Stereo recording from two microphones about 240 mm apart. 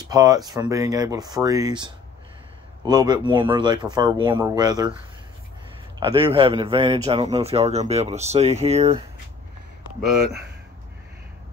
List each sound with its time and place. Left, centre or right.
0.1 s speech: centre
5.9 s a man's voice: centre